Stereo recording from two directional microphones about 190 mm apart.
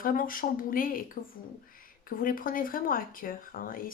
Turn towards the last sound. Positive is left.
turn(degrees=45)  # may be behind; listen again after turning